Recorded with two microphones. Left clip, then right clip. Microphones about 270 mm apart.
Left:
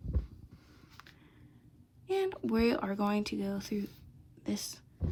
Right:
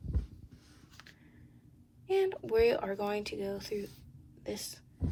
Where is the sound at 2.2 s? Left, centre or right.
Left.